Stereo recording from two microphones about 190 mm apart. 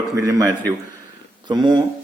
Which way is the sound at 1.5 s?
20° right (ahead or behind).